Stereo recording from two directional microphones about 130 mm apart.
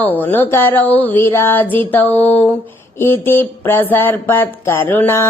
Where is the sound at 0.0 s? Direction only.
15° left (ahead or behind).